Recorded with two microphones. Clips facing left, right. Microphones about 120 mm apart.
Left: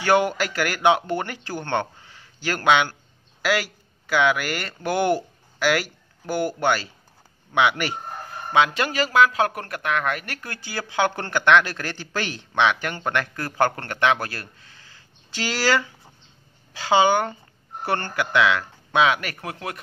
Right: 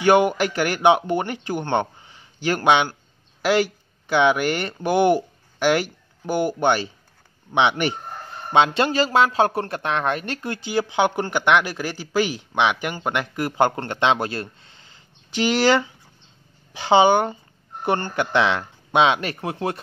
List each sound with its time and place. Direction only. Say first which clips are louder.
0.0 s speech: right 3 dB; 15° right (ahead or behind)